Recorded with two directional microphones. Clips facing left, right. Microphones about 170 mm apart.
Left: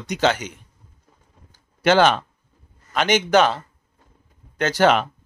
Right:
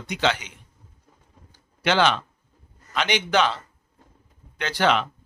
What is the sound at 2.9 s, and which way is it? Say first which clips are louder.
Speech: left 5 dB; 45° left (ahead or behind).